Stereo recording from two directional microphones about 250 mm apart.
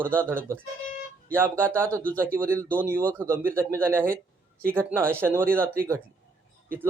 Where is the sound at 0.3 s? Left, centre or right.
Centre.